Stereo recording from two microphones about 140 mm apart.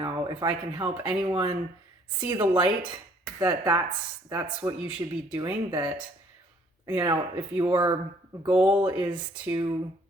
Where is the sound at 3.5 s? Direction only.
25° right (ahead or behind).